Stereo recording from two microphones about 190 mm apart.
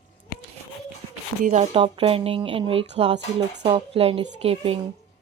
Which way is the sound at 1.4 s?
35° right (ahead or behind).